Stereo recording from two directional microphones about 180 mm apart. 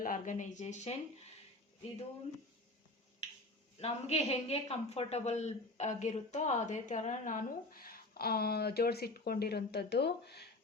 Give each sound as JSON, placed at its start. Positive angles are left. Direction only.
{"t": 0.0, "sound": "speech", "side_deg": 45}
{"t": 3.8, "sound": "a man's voice", "side_deg": 35}